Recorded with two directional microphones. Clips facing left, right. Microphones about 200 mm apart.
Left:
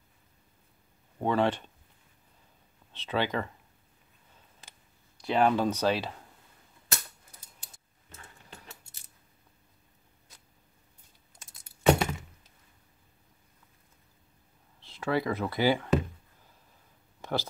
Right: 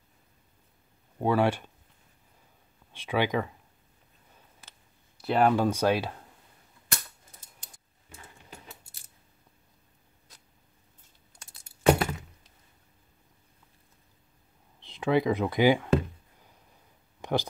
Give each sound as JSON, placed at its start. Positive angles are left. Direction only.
{"t": 1.2, "sound": "speech", "side_deg": -10}
{"t": 2.9, "sound": "speech", "side_deg": -10}
{"t": 5.2, "sound": "speech", "side_deg": -5}
{"t": 8.1, "sound": "a sound", "side_deg": -15}
{"t": 11.3, "sound": "crack", "side_deg": 0}
{"t": 14.8, "sound": "speech", "side_deg": -15}
{"t": 17.2, "sound": "a sound", "side_deg": -15}